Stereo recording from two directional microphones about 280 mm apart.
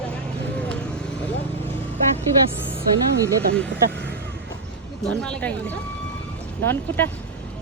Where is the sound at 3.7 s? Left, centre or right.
Right.